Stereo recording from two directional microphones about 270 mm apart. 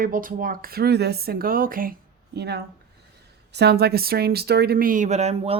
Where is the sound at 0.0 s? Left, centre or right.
Right.